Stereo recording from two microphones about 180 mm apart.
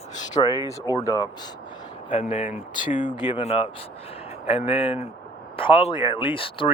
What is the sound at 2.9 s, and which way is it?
Speech, 45° left (ahead or behind).